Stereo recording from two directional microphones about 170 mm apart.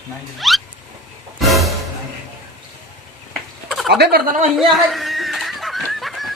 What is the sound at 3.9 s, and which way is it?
Speech, 70° right (ahead or behind).